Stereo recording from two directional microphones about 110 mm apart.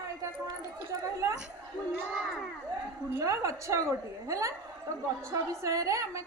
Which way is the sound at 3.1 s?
30° right (ahead or behind).